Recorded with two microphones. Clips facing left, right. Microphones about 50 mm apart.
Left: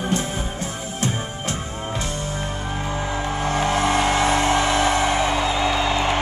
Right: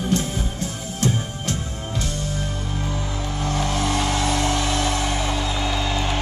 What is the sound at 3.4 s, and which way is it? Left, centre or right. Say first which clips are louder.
Music: left 3 dB; centre.